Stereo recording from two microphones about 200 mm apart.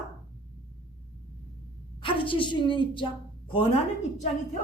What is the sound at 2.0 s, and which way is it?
A woman's voice, 25° left (ahead or behind).